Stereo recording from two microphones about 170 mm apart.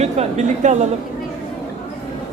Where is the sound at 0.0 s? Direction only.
40° right (ahead or behind).